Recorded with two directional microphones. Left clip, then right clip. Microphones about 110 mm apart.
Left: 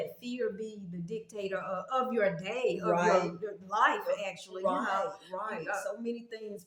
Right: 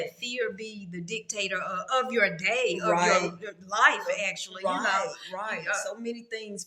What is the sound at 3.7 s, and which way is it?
Speech, 45° left (ahead or behind).